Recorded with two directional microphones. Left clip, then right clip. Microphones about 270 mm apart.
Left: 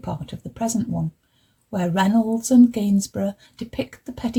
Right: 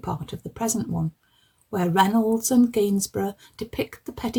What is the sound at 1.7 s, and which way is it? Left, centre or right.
Speech, right.